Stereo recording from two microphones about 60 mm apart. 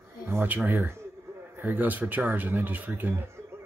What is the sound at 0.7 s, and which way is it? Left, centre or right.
Speech, right.